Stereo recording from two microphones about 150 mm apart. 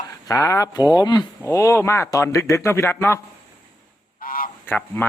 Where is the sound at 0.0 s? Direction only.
25° left (ahead or behind).